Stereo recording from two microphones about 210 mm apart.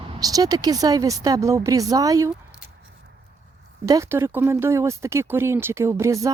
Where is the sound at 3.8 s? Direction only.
15° right (ahead or behind).